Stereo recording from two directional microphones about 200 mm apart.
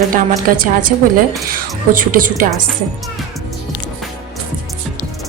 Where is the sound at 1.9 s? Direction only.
45° right (ahead or behind).